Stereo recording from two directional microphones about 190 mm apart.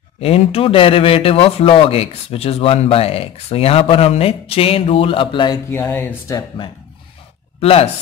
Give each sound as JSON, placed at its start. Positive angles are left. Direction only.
{"t": 0.2, "sound": "speech", "side_deg": 30}
{"t": 5.7, "sound": "speech", "side_deg": 10}
{"t": 7.6, "sound": "speech", "side_deg": 30}